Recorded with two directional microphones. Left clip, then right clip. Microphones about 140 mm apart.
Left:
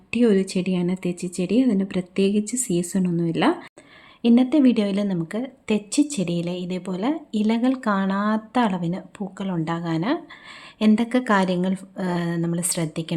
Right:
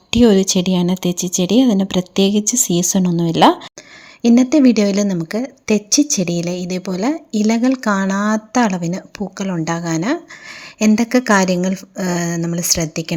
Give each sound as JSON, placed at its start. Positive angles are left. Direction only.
{"t": 0.1, "sound": "speech", "side_deg": -50}
{"t": 4.2, "sound": "a woman's voice", "side_deg": -40}